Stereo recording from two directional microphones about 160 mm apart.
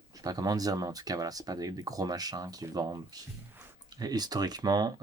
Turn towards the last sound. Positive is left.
turn(degrees=-25)  # may be behind; listen again after turning